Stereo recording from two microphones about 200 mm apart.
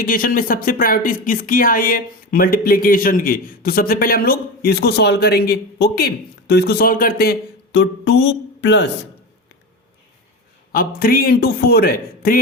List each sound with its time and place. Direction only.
0.0 s speech: 45° left (ahead or behind); by 8.9 s 60° left (ahead or behind)
10.7 s speech: 45° left (ahead or behind)